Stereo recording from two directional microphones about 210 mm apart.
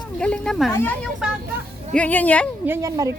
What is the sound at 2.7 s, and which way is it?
Speech, 15° right (ahead or behind).